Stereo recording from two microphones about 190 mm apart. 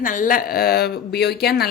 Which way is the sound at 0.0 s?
45° left (ahead or behind).